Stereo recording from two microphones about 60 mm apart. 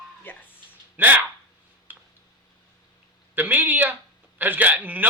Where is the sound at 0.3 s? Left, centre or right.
Left.